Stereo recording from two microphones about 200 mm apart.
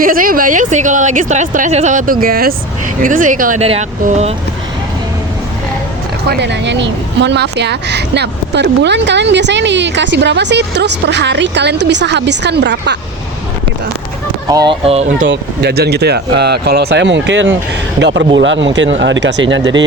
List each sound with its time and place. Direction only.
0.0 s speech: 45° right (ahead or behind)
6.2 s speech: 55° right (ahead or behind)
14.5 s speech: 20° right (ahead or behind)
15.3 s speech: 55° right (ahead or behind)